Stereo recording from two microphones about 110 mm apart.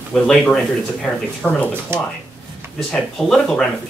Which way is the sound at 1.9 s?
20° right (ahead or behind).